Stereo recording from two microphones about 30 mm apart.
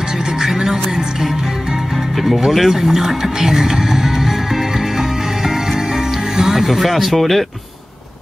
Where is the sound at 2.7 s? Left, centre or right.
Centre.